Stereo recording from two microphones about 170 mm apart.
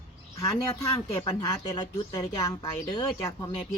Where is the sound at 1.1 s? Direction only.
30° left (ahead or behind).